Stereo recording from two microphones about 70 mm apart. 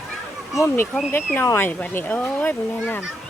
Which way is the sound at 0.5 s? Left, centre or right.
Left.